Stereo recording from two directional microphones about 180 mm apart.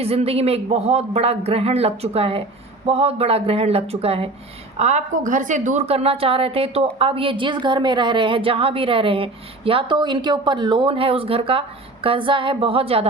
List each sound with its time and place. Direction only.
0.0 s a woman's voice: 35° right (ahead or behind)